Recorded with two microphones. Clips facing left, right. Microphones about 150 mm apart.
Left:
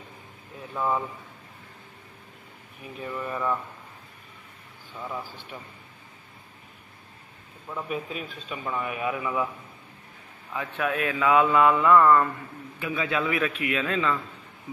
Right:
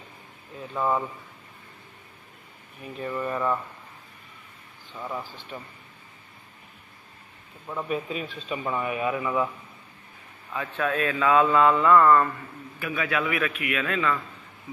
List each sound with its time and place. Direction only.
0.7 s speech: 5° right (ahead or behind)
2.8 s speech: 5° left (ahead or behind)
3.2 s speech: 5° right (ahead or behind)
4.9 s speech: centre (ahead or behind)
5.2 s a man's voice: 10° left (ahead or behind)
7.9 s speech: centre (ahead or behind)
10.5 s a man's voice: 15° left (ahead or behind)
12.7 s a man's voice: 20° left (ahead or behind)